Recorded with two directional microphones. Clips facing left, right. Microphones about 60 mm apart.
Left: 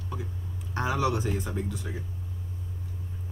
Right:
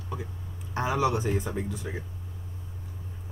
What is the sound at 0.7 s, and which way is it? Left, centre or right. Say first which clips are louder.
Speech: right 1 dB; centre.